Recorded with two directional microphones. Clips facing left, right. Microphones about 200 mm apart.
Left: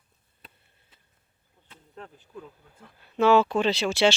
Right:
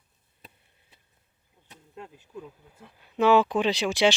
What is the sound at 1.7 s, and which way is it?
Speech, 10° right (ahead or behind).